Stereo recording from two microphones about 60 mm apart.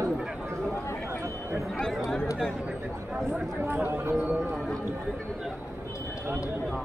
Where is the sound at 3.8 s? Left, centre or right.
Right.